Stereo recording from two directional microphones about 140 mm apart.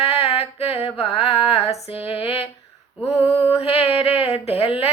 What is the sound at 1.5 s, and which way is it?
Female singing, 45° left (ahead or behind).